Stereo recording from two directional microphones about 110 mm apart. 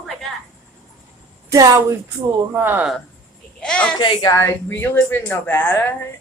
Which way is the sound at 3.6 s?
10° left (ahead or behind).